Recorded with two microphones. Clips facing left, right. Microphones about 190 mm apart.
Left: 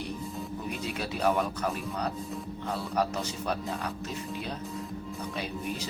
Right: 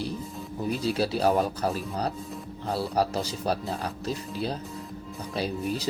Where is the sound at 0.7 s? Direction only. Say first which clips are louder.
Right 10 dB; 35° right (ahead or behind).